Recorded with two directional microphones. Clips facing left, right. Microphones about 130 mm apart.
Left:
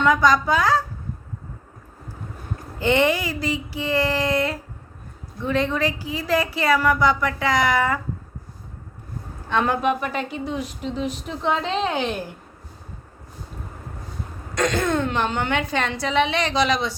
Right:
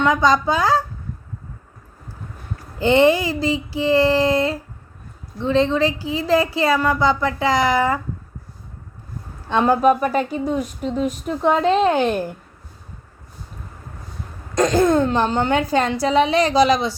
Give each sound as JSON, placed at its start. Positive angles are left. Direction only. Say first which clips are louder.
{"t": 0.0, "sound": "speech", "louder": "right 1 dB", "side_deg": -25}
{"t": 2.7, "sound": "speech", "louder": "right 5 dB", "side_deg": -30}
{"t": 9.5, "sound": "a woman's voice", "louder": "right 6 dB", "side_deg": -30}
{"t": 14.5, "sound": "a woman's voice", "louder": "right 6 dB", "side_deg": -35}